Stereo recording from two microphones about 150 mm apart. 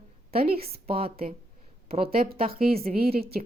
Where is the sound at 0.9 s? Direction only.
40° right (ahead or behind).